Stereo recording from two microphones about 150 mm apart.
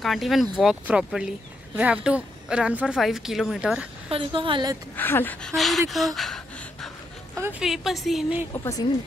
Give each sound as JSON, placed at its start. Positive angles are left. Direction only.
{"t": 0.0, "sound": "a woman's voice", "side_deg": 0}
{"t": 4.1, "sound": "a woman's voice", "side_deg": -35}
{"t": 4.9, "sound": "speech", "side_deg": 15}
{"t": 7.3, "sound": "a woman's voice", "side_deg": -15}
{"t": 7.6, "sound": "a woman's voice", "side_deg": 0}